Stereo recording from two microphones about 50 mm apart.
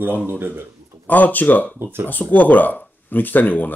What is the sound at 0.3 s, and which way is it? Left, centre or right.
Speech, right.